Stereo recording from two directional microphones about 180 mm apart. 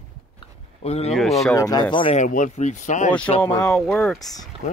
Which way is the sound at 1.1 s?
Centre (ahead or behind).